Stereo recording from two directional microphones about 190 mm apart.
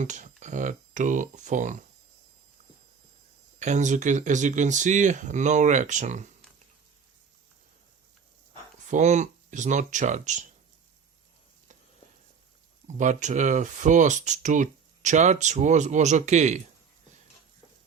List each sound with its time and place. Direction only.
0.0 s speech: 40° right (ahead or behind)
3.6 s speech: 40° right (ahead or behind)
8.9 s speech: 40° right (ahead or behind)
13.0 s speech: 40° right (ahead or behind)